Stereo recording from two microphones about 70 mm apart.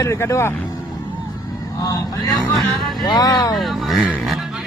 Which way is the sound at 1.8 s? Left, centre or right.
Left.